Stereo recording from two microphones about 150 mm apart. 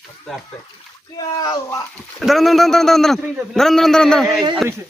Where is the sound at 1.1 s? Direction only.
25° left (ahead or behind).